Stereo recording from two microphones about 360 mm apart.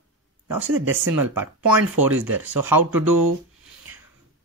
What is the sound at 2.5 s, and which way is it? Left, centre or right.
Speech, right.